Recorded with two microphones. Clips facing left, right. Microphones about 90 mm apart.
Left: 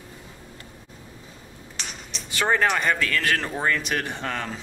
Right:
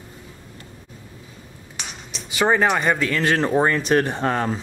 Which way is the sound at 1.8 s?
5° right (ahead or behind).